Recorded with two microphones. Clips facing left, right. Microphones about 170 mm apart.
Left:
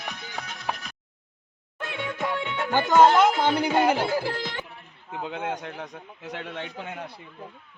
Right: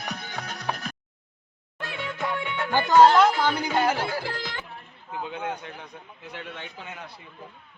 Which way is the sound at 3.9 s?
25° left (ahead or behind).